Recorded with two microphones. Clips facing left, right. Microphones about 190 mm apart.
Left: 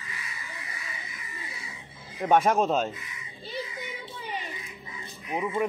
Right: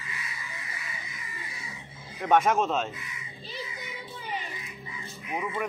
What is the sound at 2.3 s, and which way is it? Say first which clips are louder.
Speech: left 1 dB; 35° left (ahead or behind).